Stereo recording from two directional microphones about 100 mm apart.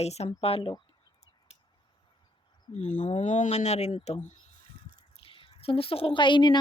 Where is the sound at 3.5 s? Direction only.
90° left.